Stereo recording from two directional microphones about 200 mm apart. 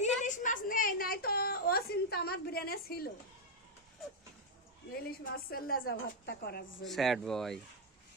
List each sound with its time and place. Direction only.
0.2 s a sound: 40° left (ahead or behind)
5.0 s a woman's voice: 45° left (ahead or behind)
6.8 s speech: centre (ahead or behind)